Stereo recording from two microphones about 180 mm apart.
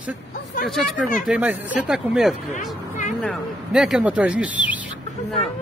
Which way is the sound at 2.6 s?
45° left (ahead or behind).